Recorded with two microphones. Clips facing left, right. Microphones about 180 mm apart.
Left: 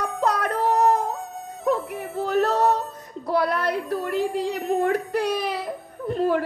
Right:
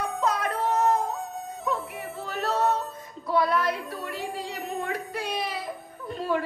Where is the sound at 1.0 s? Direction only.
Centre (ahead or behind).